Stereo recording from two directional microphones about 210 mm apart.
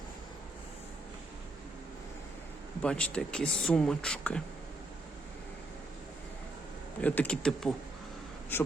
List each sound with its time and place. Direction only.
2.8 s speech: 5° left (ahead or behind)
7.0 s speech: 5° left (ahead or behind)